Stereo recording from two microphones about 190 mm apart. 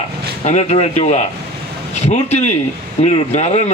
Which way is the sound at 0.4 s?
35° left (ahead or behind).